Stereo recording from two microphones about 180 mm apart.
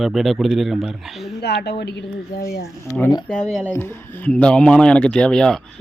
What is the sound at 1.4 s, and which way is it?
A woman's voice, 65° left (ahead or behind).